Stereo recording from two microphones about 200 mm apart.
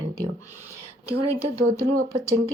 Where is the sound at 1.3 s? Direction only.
15° right (ahead or behind).